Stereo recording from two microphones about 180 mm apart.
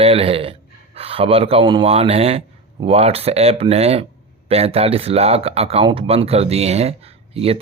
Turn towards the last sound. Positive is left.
turn(degrees=-35)  # may be behind; listen again after turning